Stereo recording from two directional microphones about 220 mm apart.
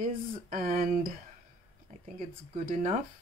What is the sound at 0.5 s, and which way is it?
Speech, 40° right (ahead or behind).